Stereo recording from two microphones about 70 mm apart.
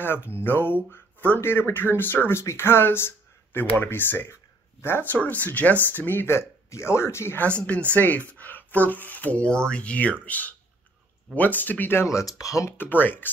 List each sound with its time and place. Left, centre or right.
0.0 s speech: left
7.3 s speech: centre; by 12.7 s left
12.7 s speech: left